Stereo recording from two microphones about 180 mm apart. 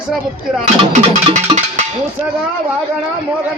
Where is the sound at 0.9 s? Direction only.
40° right (ahead or behind).